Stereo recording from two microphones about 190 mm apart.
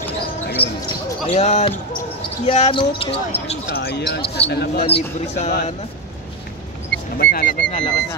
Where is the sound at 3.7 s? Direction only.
60° left (ahead or behind).